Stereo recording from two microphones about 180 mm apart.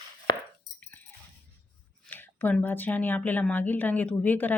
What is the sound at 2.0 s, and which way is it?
Speech, 10° left (ahead or behind).